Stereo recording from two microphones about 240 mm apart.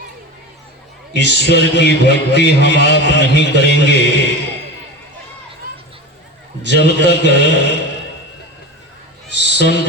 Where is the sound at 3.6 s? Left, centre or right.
Left.